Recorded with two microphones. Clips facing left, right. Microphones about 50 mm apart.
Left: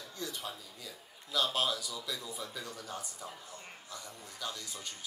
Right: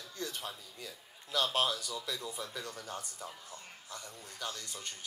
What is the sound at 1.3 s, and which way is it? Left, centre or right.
Speech, right.